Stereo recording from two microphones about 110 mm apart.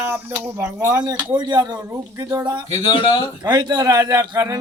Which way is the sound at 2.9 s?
50° left (ahead or behind).